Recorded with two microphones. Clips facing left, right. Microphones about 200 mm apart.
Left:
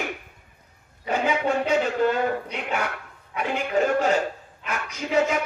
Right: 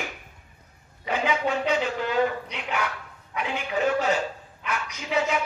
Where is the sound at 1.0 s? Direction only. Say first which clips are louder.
Left 2 dB; 45° left (ahead or behind).